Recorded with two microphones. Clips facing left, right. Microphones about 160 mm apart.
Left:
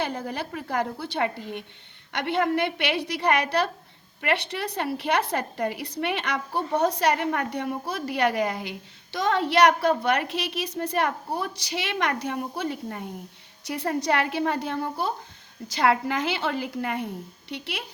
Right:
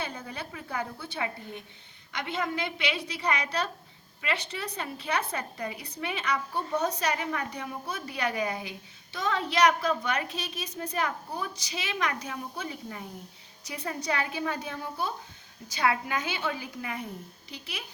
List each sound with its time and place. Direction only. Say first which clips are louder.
0.0 s a woman's voice: left 7 dB; 65° left (ahead or behind)
2.1 s a woman's voice: left 8 dB; 60° left (ahead or behind)